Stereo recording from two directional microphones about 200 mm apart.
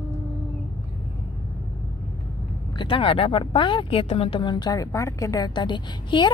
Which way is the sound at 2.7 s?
25° left (ahead or behind).